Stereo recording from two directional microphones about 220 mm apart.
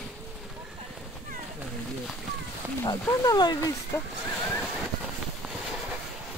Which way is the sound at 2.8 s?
15° left (ahead or behind).